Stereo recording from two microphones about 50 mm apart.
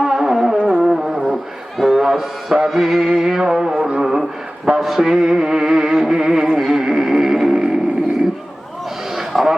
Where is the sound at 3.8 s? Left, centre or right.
Right.